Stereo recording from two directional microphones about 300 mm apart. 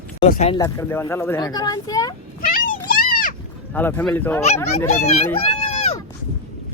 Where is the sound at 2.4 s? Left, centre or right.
Left.